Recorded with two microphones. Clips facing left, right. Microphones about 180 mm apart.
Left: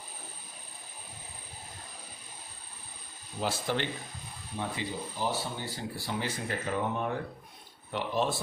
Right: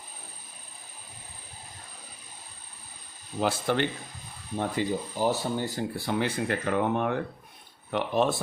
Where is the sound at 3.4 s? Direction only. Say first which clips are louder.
Right 5 dB; 55° right (ahead or behind).